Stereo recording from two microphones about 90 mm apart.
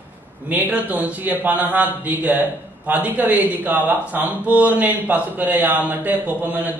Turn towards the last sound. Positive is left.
turn(degrees=-20)  # may be behind; listen again after turning